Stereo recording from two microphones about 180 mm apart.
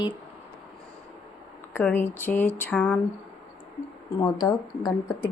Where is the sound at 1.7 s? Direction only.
10° left (ahead or behind).